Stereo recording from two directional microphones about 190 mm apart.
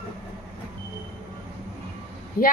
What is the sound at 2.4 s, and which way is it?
Speech, 50° left (ahead or behind).